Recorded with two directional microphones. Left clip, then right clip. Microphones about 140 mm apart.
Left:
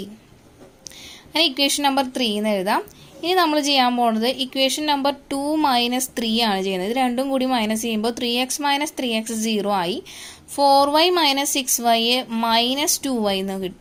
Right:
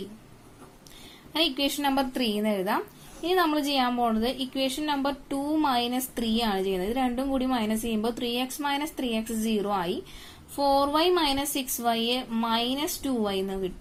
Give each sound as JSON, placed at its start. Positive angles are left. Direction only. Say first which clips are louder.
{"t": 1.3, "sound": "a woman's voice", "louder": "left 7 dB", "side_deg": 45}